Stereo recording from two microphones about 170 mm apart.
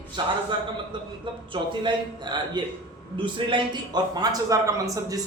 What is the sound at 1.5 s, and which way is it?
A man's voice, 30° right (ahead or behind).